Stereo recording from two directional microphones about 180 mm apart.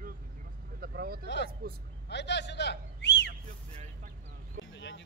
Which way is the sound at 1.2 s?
75° left (ahead or behind).